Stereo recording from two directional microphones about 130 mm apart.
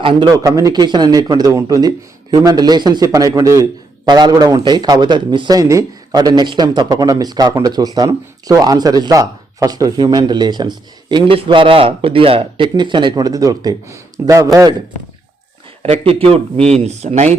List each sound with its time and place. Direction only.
0.0 s a man's voice: 40° right (ahead or behind)
0.3 s a man's voice: 25° right (ahead or behind)
15.8 s speech: 50° right (ahead or behind)